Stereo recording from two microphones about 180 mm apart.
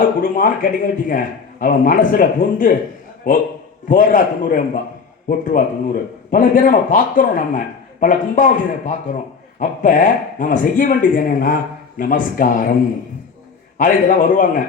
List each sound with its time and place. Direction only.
0.0 s speech: 50° left (ahead or behind)
13.7 s speech: 45° left (ahead or behind)